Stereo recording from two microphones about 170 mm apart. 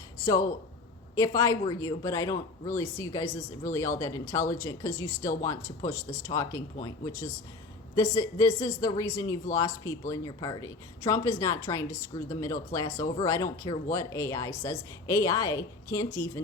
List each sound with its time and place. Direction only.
1.1 s speech: 20° left (ahead or behind)